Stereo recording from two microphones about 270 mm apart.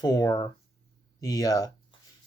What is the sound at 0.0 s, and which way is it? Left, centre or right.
Speech, centre.